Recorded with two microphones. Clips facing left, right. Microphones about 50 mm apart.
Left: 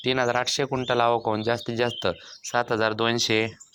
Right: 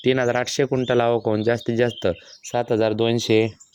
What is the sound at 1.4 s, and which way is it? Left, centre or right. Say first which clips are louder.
Speech: right 5 dB; right.